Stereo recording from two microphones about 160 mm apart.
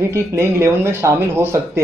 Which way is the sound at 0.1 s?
15° right (ahead or behind).